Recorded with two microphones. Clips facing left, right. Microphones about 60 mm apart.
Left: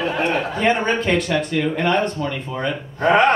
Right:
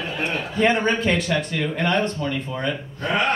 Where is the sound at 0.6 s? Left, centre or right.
Centre.